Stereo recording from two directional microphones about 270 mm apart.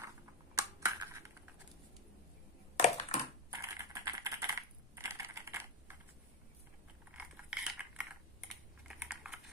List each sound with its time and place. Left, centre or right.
0.6 s computer keyboard: centre
2.8 s a sound: left
3.4 s typing: centre
7.1 s mechanisms: centre
8.8 s typing: centre